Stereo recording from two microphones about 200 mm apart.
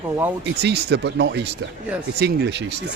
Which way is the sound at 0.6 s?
55° right (ahead or behind).